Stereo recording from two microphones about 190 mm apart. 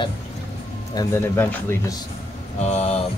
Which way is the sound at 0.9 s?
15° left (ahead or behind).